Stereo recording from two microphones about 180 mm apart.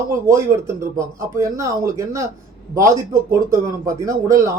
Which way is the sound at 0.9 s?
15° right (ahead or behind).